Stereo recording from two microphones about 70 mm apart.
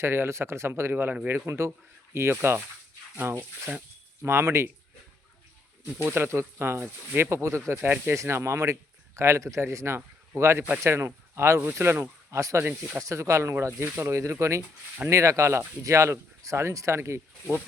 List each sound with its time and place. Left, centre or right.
0.0 s speech: right
3.7 s speech: right
4.2 s speech: right
5.8 s speech: right
8.1 s speech: right
12.4 s speech: right